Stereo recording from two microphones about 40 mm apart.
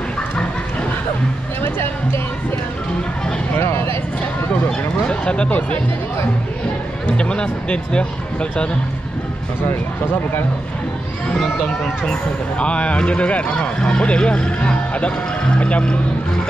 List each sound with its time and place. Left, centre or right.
1.6 s a sound: left
3.5 s a sound: left
4.6 s speech: left
7.2 s speech: left
11.3 s speech: centre
12.1 s speech: left